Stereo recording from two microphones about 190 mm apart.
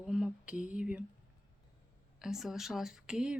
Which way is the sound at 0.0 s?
5° right (ahead or behind).